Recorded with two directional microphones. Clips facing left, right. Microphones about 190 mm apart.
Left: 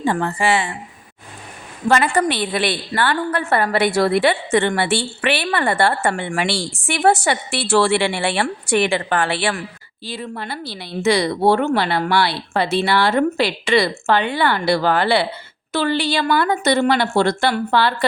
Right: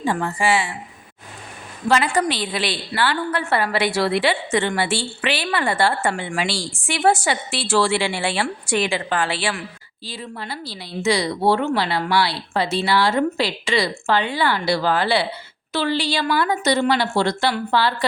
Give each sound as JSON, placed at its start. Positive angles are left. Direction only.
{"t": 0.0, "sound": "a woman's voice", "side_deg": 55}
{"t": 1.9, "sound": "a woman's voice", "side_deg": 50}